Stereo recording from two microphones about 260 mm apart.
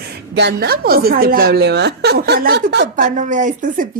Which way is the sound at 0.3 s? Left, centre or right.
Right.